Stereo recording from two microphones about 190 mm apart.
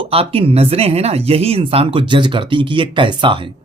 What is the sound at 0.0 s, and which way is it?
Speech, 30° right (ahead or behind).